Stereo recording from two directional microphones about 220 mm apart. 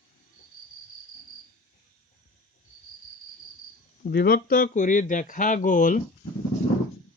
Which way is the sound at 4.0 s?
45° left (ahead or behind).